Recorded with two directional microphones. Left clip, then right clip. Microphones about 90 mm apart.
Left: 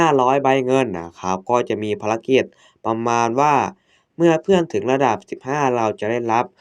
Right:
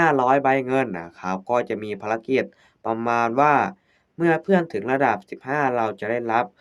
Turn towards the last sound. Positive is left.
turn(degrees=35)  # may be behind; listen again after turning